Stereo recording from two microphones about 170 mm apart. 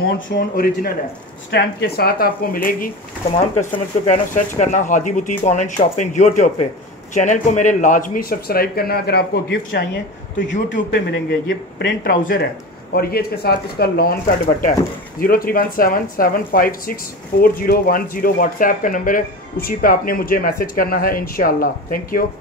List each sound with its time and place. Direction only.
0.4 s speech: 65° left (ahead or behind)
4.1 s speech: 45° left (ahead or behind)
10.3 s a man's voice: 90° left; by 22.2 s 55° left (ahead or behind)